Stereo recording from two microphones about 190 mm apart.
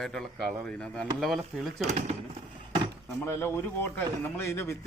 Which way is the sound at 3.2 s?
10° left (ahead or behind).